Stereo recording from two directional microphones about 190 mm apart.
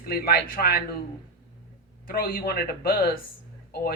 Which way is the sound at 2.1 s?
50° left (ahead or behind).